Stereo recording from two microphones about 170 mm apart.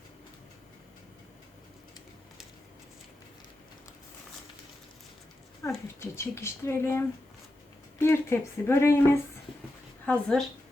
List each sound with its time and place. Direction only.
5.6 s speech: 15° left (ahead or behind)
10.1 s speech: 5° left (ahead or behind)